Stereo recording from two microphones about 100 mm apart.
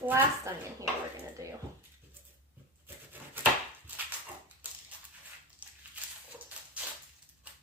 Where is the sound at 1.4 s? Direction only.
35° right (ahead or behind).